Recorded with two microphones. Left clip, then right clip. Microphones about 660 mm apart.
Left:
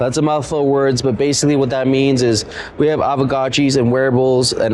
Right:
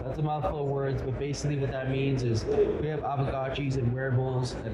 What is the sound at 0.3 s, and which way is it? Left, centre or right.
Speech, left.